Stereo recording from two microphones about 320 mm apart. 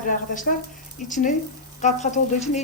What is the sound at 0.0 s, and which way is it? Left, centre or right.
A woman's voice, left.